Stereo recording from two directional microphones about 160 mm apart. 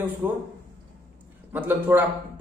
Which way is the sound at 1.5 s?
10° right (ahead or behind).